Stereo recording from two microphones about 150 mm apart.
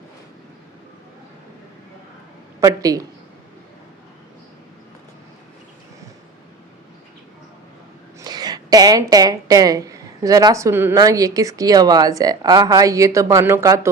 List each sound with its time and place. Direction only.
2.6 s speech: 25° right (ahead or behind)
8.2 s a woman's voice: 25° right (ahead or behind)